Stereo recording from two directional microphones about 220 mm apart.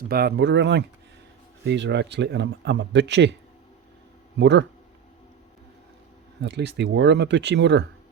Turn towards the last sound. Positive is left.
turn(degrees=-55)  # may be behind; listen again after turning